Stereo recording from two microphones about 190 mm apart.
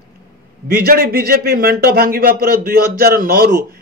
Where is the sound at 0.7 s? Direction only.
50° right (ahead or behind).